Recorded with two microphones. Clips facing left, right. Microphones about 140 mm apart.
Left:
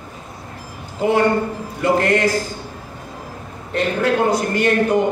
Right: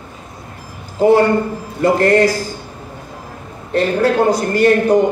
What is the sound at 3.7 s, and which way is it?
A man's voice, 35° right (ahead or behind).